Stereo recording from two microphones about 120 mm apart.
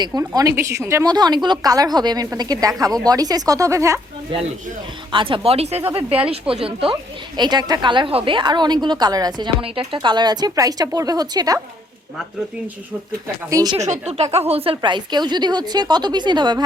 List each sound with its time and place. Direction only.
0.2 s speech: 25° right (ahead or behind)
1.0 s a woman's voice: 35° right (ahead or behind)
5.1 s speech: 45° right (ahead or behind)
7.3 s a woman's voice: 35° right (ahead or behind)
9.6 s a woman's voice: 45° right (ahead or behind)
13.2 s speech: 30° right (ahead or behind)
13.7 s speech: 70° right (ahead or behind); by 14.8 s 55° right (ahead or behind)
14.8 s a woman's voice: 40° right (ahead or behind)